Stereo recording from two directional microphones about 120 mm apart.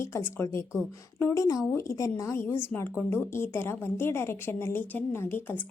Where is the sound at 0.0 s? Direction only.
20° left (ahead or behind).